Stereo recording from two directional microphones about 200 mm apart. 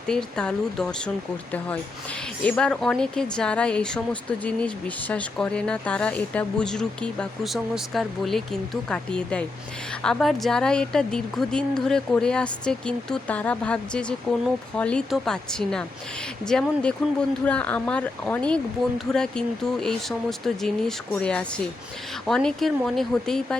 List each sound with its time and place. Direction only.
0.1 s speech: 5° left (ahead or behind)